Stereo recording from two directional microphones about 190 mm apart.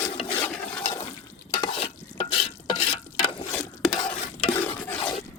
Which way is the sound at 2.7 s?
30° left (ahead or behind).